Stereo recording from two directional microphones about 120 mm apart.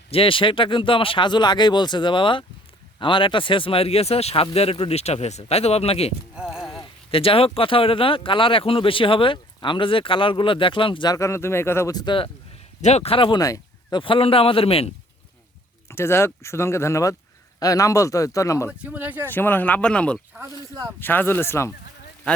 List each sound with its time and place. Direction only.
0.1 s speech: 50° left (ahead or behind)
6.3 s clip-clop: 5° right (ahead or behind)
7.1 s speech: 50° left (ahead or behind)
11.1 s speech: 25° left (ahead or behind)
11.9 s speech: 35° left (ahead or behind)
12.8 s speech: 60° left (ahead or behind); by 13.4 s 45° left (ahead or behind)
13.4 s a sound: 30° left (ahead or behind)
14.0 s speech: 50° left (ahead or behind)
15.9 s speech: 20° left (ahead or behind)
18.8 s speech: 10° right (ahead or behind)
19.3 s speech: 15° left (ahead or behind)